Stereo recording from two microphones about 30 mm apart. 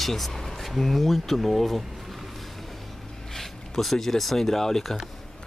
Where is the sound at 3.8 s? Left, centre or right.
Centre.